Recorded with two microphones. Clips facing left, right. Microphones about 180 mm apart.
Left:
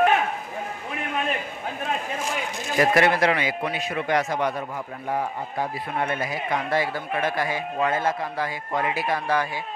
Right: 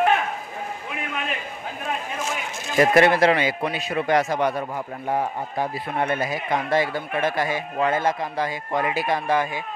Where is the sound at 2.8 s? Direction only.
25° right (ahead or behind).